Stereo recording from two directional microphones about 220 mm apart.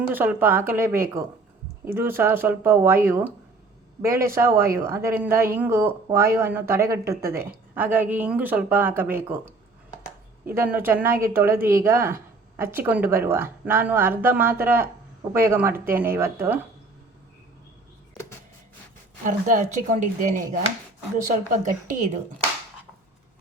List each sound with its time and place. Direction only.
0.1 s speech: 10° right (ahead or behind)
10.5 s speech: 10° right (ahead or behind)
19.2 s speech: 35° right (ahead or behind)